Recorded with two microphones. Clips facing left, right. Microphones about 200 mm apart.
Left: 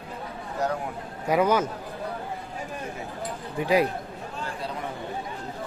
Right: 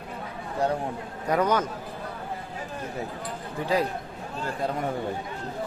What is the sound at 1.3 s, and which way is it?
Speech, 10° left (ahead or behind).